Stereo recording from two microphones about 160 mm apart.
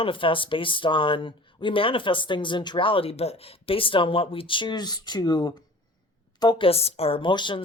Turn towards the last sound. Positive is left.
turn(degrees=30)  # may be behind; listen again after turning